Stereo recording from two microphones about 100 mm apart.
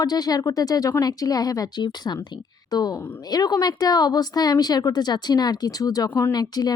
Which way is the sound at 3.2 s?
40° left (ahead or behind).